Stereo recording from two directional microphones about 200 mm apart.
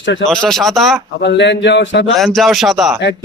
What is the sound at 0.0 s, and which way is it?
Speech, 65° left (ahead or behind).